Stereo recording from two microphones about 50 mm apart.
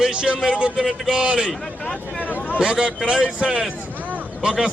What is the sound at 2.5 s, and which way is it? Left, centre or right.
A man's voice, centre.